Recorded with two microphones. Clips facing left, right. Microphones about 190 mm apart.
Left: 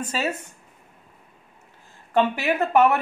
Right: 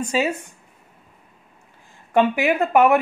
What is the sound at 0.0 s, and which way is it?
Speech, 15° right (ahead or behind).